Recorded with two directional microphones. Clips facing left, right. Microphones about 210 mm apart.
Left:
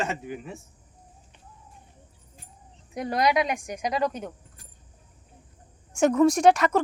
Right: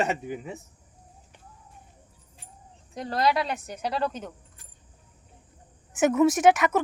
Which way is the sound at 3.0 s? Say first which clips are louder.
Left 2 dB; 15° left (ahead or behind).